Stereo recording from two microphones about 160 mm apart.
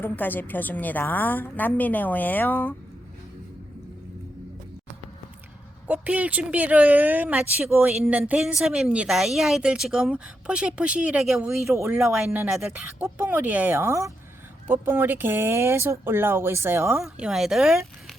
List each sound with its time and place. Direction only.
0.0 s a woman's voice: 10° left (ahead or behind)
5.9 s a woman's voice: 10° right (ahead or behind)
11.7 s speech: 20° right (ahead or behind)
12.1 s speech: 10° right (ahead or behind)
17.2 s a woman's voice: 5° right (ahead or behind)